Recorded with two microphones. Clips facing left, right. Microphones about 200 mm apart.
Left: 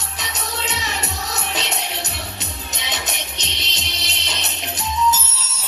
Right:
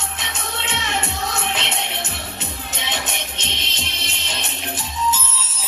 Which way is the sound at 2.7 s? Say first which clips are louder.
Right 1 dB; 40° left (ahead or behind).